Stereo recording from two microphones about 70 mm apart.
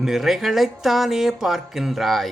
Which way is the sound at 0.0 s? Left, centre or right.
Centre.